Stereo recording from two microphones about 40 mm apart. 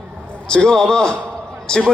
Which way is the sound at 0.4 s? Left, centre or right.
Left.